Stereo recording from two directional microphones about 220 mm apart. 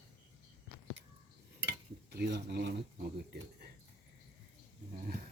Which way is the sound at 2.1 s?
50° right (ahead or behind).